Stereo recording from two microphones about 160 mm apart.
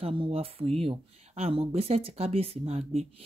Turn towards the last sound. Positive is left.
turn(degrees=-40)  # may be behind; listen again after turning